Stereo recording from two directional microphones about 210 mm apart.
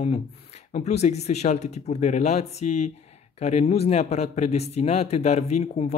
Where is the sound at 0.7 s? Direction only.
30° left (ahead or behind).